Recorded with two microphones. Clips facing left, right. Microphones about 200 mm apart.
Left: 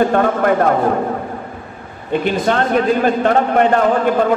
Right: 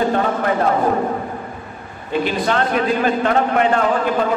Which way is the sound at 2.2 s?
50° left (ahead or behind).